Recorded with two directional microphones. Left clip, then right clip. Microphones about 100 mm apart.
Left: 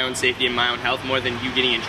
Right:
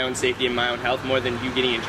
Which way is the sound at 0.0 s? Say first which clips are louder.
Left 2 dB; 25° left (ahead or behind).